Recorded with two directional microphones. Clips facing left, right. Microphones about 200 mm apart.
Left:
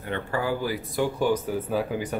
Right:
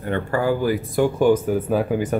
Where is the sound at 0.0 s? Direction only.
45° right (ahead or behind).